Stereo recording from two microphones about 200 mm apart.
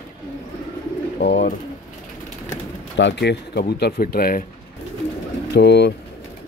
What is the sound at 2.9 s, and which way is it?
Speech, 60° left (ahead or behind).